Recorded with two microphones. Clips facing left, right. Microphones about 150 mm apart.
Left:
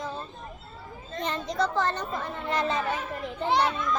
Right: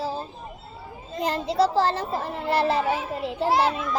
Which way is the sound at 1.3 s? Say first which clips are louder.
Right 6 dB; 35° right (ahead or behind).